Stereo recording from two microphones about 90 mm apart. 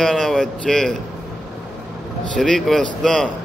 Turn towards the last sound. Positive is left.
turn(degrees=5)  # may be behind; listen again after turning